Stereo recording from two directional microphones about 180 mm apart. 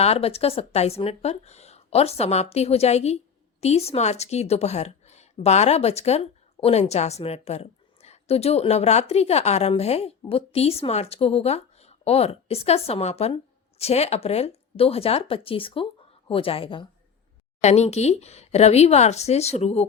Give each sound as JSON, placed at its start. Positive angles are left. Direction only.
{"t": 0.0, "sound": "a woman's voice", "side_deg": 35}
{"t": 17.6, "sound": "a woman's voice", "side_deg": 40}